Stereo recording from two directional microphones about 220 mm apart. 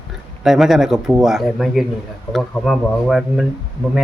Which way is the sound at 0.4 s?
Centre (ahead or behind).